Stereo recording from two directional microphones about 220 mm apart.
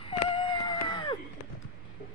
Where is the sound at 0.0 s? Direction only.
25° left (ahead or behind).